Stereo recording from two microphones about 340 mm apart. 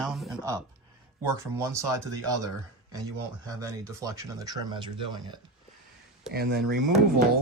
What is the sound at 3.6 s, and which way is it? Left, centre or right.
Speech, centre.